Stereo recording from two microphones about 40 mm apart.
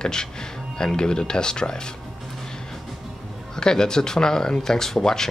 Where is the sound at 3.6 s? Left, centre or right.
Centre.